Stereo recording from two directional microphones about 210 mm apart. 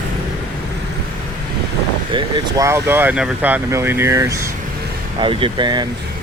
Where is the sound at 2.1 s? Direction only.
20° right (ahead or behind).